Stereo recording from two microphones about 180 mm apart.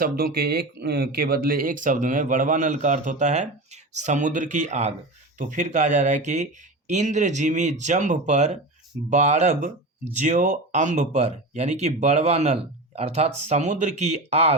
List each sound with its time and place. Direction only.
0.0 s speech: 55° right (ahead or behind); by 14.5 s 35° right (ahead or behind)